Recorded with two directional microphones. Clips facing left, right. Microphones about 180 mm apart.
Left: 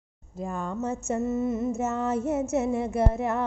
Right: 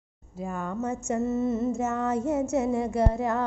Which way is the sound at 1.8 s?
25° left (ahead or behind).